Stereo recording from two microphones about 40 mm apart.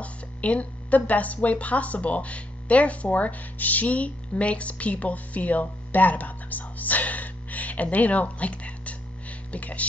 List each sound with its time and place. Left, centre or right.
0.0 s a woman's voice: left